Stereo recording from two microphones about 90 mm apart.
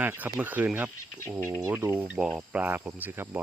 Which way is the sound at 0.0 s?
20° right (ahead or behind).